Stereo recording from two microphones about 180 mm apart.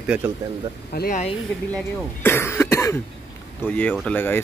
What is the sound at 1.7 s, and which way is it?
A man's voice, 10° left (ahead or behind).